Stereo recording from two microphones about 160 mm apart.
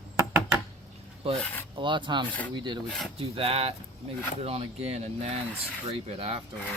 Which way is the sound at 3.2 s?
35° right (ahead or behind).